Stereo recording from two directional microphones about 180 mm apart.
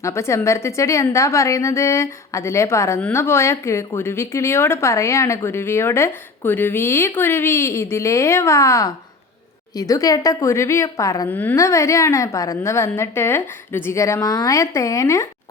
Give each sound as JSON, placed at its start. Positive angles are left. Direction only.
{"t": 0.0, "sound": "a woman's voice", "side_deg": 15}